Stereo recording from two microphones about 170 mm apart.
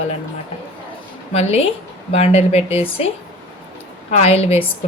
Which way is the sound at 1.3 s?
40° left (ahead or behind).